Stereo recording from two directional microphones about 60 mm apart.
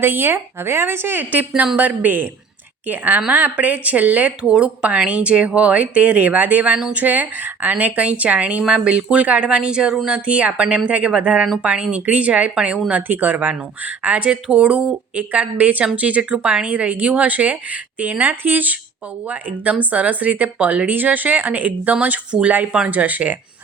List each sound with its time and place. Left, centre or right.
0.0 s a woman's voice: right
13.0 s speech: right
19.8 s speech: right